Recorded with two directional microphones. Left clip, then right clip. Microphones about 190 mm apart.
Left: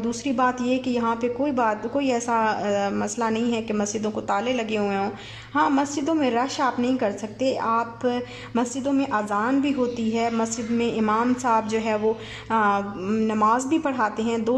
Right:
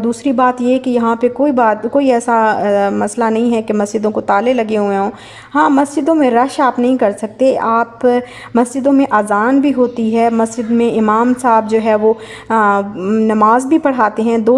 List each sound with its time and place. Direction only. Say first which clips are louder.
0.0 s a woman's voice: right 10 dB; 20° right (ahead or behind)